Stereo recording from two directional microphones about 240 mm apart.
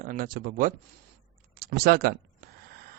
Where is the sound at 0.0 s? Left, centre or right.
Right.